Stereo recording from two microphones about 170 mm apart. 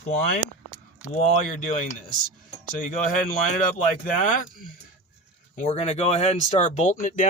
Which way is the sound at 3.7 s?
45° left (ahead or behind).